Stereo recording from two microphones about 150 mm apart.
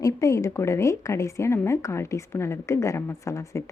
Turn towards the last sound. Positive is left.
turn(degrees=20)  # may be behind; listen again after turning